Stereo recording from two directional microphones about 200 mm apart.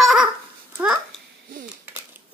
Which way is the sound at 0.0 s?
Centre (ahead or behind).